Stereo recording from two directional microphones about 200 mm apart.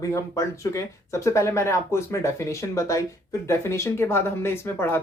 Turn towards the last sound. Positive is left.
turn(degrees=10)  # may be behind; listen again after turning